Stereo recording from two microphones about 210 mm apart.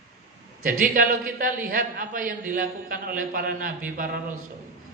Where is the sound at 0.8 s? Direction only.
45° right (ahead or behind).